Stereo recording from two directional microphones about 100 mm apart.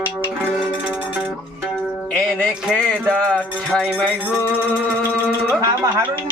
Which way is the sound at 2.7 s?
15° left (ahead or behind).